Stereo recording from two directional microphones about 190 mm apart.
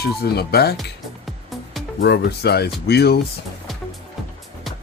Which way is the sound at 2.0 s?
60° left (ahead or behind).